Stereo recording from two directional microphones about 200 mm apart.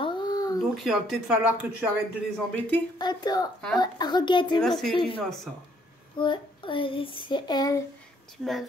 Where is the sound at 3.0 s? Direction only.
20° left (ahead or behind).